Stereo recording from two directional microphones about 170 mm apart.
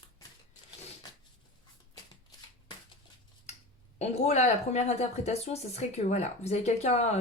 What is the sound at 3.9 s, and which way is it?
Speech, 40° left (ahead or behind).